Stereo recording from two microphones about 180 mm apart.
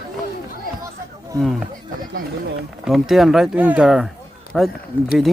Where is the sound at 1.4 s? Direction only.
Centre (ahead or behind).